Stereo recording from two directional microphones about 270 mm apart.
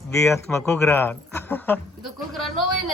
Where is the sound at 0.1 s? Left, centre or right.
Centre.